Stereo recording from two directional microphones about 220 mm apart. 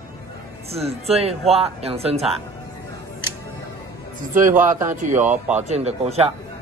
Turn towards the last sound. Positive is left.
turn(degrees=-30)  # may be behind; listen again after turning